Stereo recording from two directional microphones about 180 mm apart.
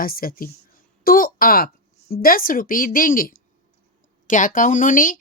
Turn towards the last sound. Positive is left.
turn(degrees=50)  # may be behind; listen again after turning